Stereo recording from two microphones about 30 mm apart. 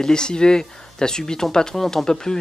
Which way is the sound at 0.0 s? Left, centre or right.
Left.